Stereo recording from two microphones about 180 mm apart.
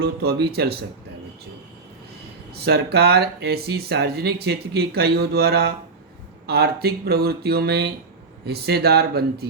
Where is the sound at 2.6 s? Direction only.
65° right (ahead or behind).